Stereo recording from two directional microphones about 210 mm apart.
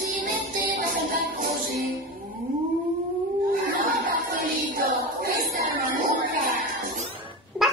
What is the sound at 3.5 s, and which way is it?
Child singing, 45° right (ahead or behind).